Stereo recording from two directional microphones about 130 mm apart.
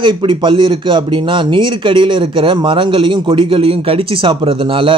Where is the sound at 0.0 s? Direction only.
40° right (ahead or behind).